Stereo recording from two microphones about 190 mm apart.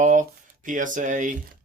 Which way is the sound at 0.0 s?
40° right (ahead or behind).